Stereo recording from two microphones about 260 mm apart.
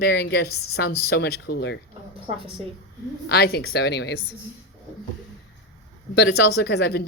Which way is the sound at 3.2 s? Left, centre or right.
Left.